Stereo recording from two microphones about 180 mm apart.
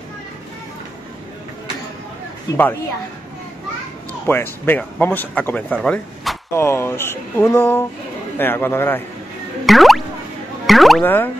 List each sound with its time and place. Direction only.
2.5 s speech: 20° left (ahead or behind)
4.3 s speech: 10° left (ahead or behind)
6.5 s speech: 15° left (ahead or behind)
9.7 s music: centre (ahead or behind)
10.7 s speech: centre (ahead or behind)